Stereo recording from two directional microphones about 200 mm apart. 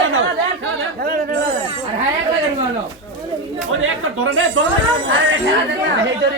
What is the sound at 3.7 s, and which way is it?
Speech, 85° right.